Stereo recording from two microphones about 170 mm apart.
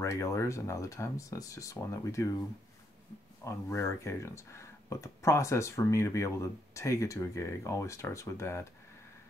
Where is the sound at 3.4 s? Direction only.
15° left (ahead or behind).